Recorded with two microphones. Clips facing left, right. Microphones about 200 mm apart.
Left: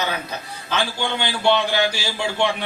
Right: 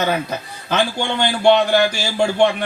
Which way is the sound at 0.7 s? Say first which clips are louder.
Right 4 dB; 50° right (ahead or behind).